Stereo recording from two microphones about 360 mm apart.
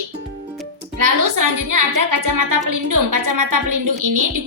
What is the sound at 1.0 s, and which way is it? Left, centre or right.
A woman's voice, right.